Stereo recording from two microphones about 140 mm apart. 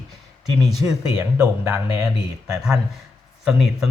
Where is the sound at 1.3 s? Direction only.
15° right (ahead or behind).